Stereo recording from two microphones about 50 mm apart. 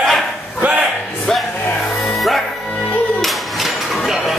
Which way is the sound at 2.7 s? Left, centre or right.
Left.